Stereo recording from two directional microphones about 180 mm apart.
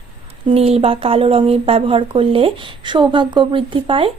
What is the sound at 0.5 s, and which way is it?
Speech, 35° right (ahead or behind).